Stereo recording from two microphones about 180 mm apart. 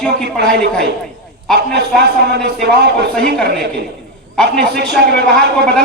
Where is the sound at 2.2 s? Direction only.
65° right (ahead or behind).